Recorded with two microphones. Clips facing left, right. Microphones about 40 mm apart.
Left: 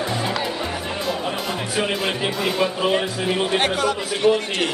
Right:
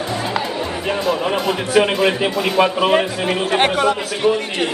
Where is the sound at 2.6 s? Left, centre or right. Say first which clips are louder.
Right 7 dB; right.